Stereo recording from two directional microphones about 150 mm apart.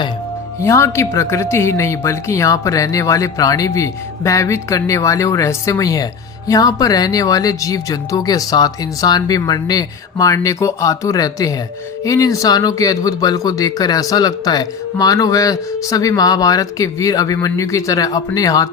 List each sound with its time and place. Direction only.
0.6 s speech: 20° left (ahead or behind)